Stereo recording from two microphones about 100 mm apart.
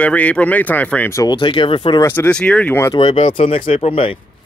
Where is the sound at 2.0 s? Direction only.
20° left (ahead or behind).